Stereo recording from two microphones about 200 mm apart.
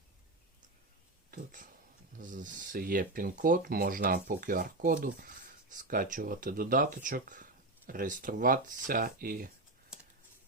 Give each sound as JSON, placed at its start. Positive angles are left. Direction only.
{"t": 2.1, "sound": "speech", "side_deg": -40}
{"t": 9.9, "sound": "computer keyboard", "side_deg": -5}